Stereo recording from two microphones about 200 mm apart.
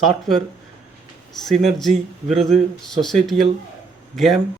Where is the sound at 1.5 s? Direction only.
Centre (ahead or behind).